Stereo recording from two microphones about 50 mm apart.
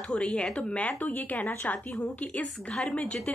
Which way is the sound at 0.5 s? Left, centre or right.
Left.